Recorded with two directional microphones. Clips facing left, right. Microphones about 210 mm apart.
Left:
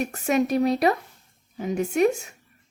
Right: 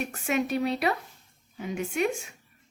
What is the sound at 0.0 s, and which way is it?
A woman's voice, 40° left (ahead or behind).